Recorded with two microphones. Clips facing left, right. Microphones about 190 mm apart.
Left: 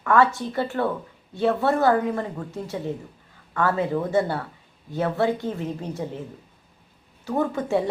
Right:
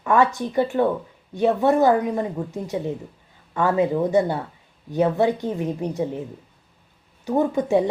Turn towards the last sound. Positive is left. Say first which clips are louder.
# right 4 dB
turn(degrees=-20)  # may be behind; listen again after turning